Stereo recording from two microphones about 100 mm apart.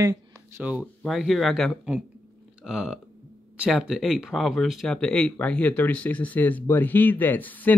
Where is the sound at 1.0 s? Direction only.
Centre (ahead or behind).